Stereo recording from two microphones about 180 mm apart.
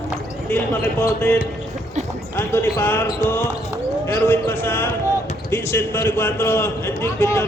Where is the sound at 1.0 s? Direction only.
15° left (ahead or behind).